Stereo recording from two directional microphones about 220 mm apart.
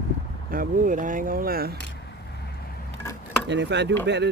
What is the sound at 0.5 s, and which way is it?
Speech, 40° right (ahead or behind).